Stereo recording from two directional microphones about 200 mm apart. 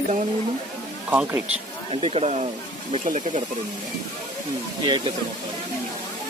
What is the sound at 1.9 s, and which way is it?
Speech, 30° right (ahead or behind).